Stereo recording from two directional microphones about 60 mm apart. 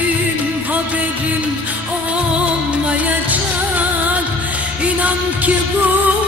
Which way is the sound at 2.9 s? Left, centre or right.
Right.